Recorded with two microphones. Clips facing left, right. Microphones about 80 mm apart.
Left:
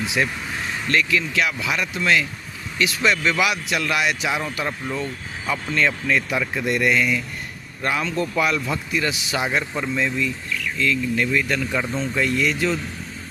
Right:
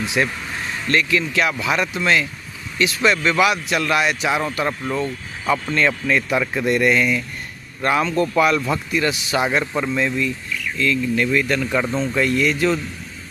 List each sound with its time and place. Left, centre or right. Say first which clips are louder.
0.9 s speech: right 2 dB; right
4.3 s speech: right 4 dB; right
5.5 s speech: right 3 dB; right
7.8 s speech: right 5 dB; right
12.2 s speech: right 3 dB; right